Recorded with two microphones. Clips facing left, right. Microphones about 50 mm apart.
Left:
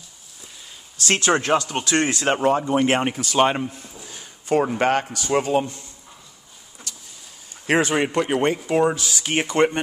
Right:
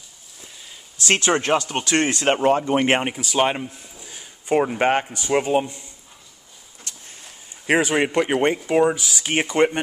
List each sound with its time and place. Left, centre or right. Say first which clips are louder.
0.9 s a sound: right 1 dB; right
1.6 s speech: right 1 dB; right
3.0 s speech: left 2 dB; centre
4.0 s a sound: left 1 dB; centre
4.5 s speech: even; centre
6.9 s vehicle: even; right
7.6 s speech: right 1 dB; centre